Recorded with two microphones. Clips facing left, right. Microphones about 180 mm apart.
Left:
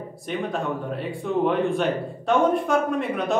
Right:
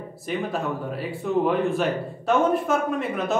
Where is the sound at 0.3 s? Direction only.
5° right (ahead or behind).